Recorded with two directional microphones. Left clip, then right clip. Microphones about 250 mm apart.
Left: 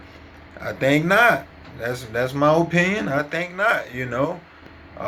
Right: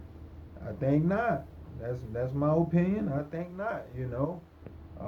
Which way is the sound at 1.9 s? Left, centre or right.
Centre.